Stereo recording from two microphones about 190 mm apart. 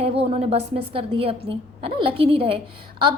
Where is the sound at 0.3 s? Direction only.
35° right (ahead or behind).